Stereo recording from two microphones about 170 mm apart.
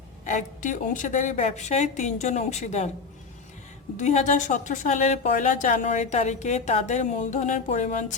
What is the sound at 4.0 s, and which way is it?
Speech, 45° left (ahead or behind).